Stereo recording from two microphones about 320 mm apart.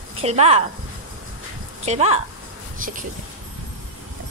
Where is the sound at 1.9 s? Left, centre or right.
Centre.